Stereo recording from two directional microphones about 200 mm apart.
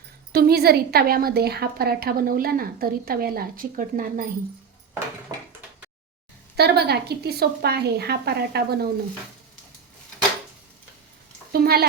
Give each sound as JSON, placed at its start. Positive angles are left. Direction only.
{"t": 0.3, "sound": "a woman's voice", "side_deg": -50}
{"t": 5.3, "sound": "door", "side_deg": -20}
{"t": 6.6, "sound": "a woman's voice", "side_deg": -55}
{"t": 11.5, "sound": "a sound", "side_deg": -50}